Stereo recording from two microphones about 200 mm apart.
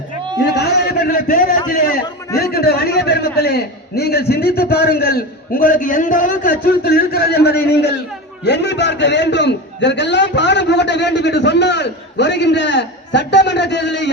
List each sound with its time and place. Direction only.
0.4 s a man's voice: 55° left (ahead or behind)